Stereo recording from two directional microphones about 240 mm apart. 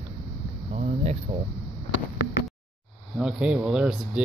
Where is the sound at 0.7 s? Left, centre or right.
Right.